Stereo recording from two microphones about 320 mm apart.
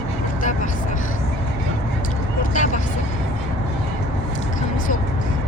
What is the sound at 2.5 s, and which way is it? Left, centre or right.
Vehicle, left.